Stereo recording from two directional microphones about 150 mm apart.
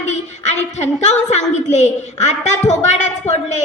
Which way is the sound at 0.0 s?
50° left (ahead or behind).